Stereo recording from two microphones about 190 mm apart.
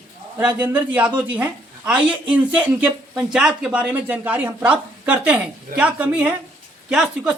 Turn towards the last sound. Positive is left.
turn(degrees=-5)  # may be behind; listen again after turning